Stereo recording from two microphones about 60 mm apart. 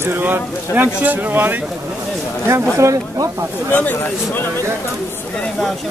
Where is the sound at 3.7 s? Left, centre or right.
Left.